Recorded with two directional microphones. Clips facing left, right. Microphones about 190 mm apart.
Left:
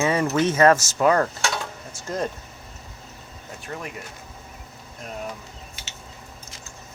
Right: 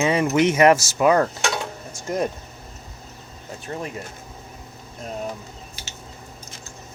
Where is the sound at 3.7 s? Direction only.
30° right (ahead or behind).